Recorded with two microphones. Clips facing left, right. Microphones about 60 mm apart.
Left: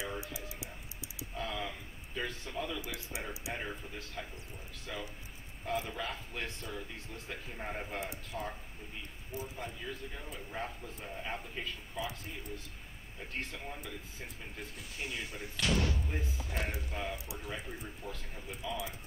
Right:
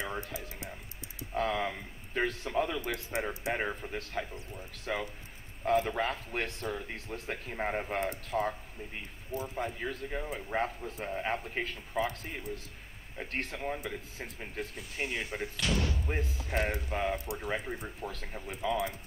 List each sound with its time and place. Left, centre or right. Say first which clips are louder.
0.0 s music: right 3 dB; right
1.3 s a man's voice: right 8 dB; right
15.5 s speech: left 1 dB; centre
16.1 s a man's voice: right 5 dB; right
18.0 s speech: right 4 dB; right
18.5 s a man's voice: right 7 dB; right